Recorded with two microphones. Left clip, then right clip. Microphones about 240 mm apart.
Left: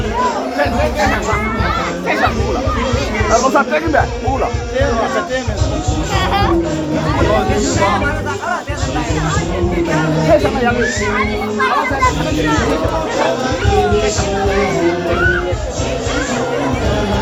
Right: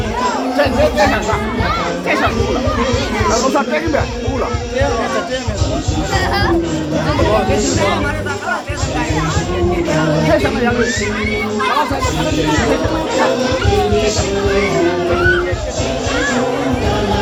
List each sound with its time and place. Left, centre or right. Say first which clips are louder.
3.5 s speech: left 2 dB; centre
10.2 s speech: left 2 dB; centre